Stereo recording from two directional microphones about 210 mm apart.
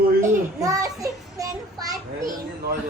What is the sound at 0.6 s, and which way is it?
A child's voice, 15° right (ahead or behind).